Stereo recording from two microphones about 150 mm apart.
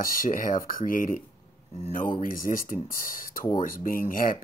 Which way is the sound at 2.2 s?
65° left (ahead or behind).